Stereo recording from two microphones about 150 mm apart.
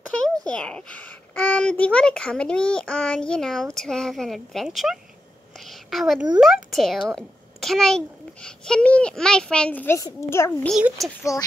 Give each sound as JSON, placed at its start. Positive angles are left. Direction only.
{"t": 0.4, "sound": "a child's voice", "side_deg": 5}
{"t": 5.7, "sound": "a sound", "side_deg": 0}
{"t": 6.4, "sound": "a child's voice", "side_deg": 0}
{"t": 10.7, "sound": "a child's voice", "side_deg": 0}
{"t": 11.3, "sound": "speech", "side_deg": 20}